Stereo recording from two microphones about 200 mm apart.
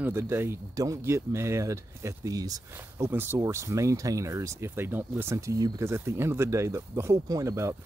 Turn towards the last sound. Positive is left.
turn(degrees=-15)  # may be behind; listen again after turning